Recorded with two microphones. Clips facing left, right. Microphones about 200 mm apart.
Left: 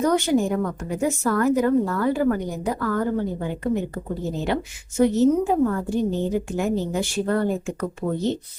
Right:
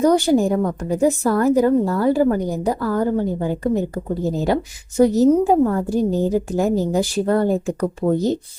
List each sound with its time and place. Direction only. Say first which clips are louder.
0.0 s a woman's voice: right 5 dB; 35° right (ahead or behind)